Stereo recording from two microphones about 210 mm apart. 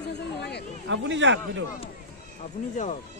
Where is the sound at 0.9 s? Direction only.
60° right (ahead or behind).